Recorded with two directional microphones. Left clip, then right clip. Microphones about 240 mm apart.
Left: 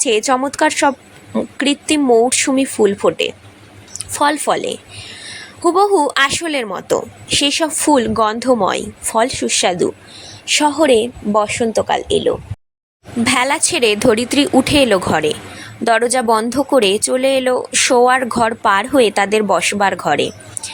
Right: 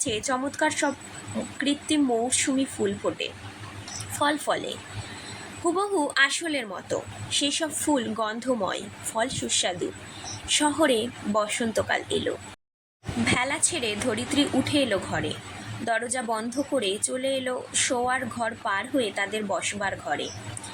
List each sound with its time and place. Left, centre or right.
0.0 s speech: left
5.7 s a woman's voice: left
13.2 s speech: left